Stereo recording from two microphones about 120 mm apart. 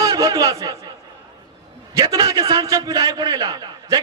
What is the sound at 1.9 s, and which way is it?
A man's voice, 30° right (ahead or behind).